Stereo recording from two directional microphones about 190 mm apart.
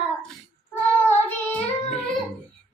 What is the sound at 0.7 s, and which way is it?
Child singing, 10° left (ahead or behind).